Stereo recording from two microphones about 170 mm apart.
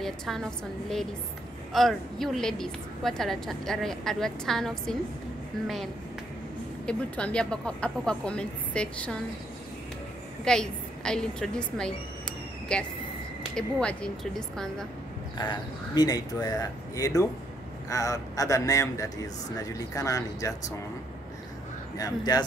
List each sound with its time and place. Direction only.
0.0 s a woman's voice: centre (ahead or behind)
6.9 s a woman's voice: 5° left (ahead or behind)
10.4 s a woman's voice: 5° left (ahead or behind)
15.3 s speech: 25° left (ahead or behind)
21.9 s speech: 20° left (ahead or behind)